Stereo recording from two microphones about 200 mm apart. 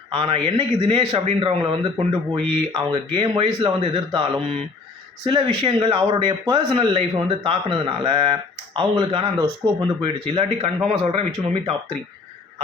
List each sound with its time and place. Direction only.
0.1 s speech: 25° right (ahead or behind)